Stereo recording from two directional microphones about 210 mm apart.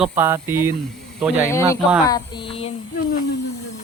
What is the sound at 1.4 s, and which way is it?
Speech, 15° left (ahead or behind).